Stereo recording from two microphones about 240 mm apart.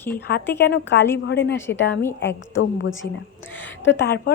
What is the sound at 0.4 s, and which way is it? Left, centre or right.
Speech, centre.